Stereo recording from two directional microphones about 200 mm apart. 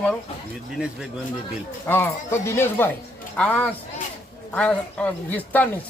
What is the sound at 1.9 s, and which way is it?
Speech, 10° left (ahead or behind).